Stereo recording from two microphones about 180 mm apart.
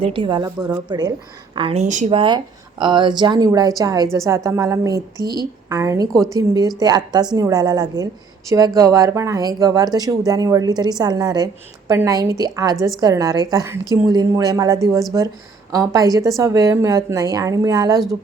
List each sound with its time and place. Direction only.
0.0 s speech: 30° right (ahead or behind)
2.0 s a woman's voice: 30° right (ahead or behind)